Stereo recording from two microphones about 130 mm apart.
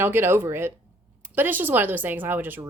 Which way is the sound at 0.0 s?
20° right (ahead or behind).